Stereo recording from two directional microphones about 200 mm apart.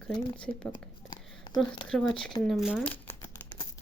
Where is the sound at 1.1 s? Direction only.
20° left (ahead or behind).